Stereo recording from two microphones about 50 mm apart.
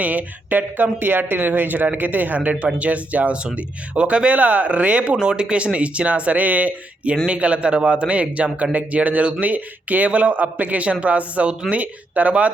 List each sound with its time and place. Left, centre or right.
0.0 s speech: right
5.2 s speech: centre